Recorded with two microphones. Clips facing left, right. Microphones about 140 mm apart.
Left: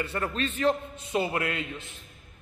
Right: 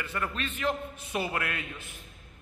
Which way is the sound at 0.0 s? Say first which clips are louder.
Left 4 dB; 30° left (ahead or behind).